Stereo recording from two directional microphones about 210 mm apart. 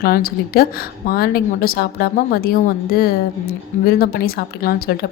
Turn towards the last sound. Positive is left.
turn(degrees=45)  # may be behind; listen again after turning